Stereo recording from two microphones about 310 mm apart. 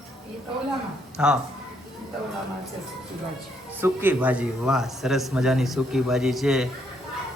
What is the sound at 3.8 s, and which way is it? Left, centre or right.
A man's voice, centre.